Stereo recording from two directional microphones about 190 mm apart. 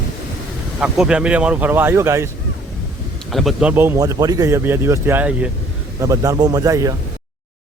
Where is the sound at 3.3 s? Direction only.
Centre (ahead or behind).